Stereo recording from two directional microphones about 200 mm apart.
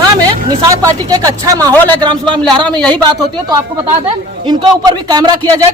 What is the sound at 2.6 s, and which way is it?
Speech, 5° left (ahead or behind).